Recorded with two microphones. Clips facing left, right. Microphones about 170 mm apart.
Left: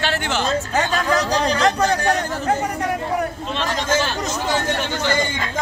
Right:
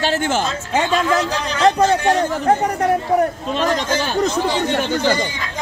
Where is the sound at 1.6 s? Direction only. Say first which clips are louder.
Right 4 dB; 30° right (ahead or behind).